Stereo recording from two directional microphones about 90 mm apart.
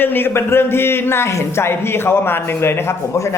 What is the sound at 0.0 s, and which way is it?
Speech, 25° left (ahead or behind).